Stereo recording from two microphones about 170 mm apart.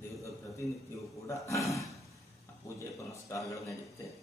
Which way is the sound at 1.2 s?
15° left (ahead or behind).